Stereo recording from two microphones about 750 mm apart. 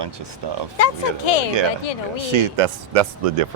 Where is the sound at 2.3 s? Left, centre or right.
Right.